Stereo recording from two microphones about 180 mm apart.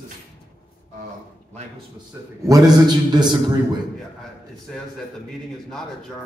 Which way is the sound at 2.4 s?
20° right (ahead or behind).